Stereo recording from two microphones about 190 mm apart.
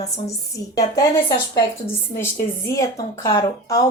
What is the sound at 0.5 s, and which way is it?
Speech, 20° left (ahead or behind).